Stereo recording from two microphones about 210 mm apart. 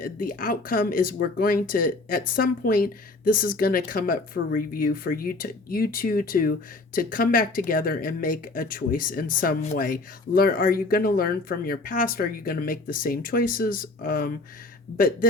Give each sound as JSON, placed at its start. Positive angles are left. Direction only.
{"t": 0.0, "sound": "speech", "side_deg": 40}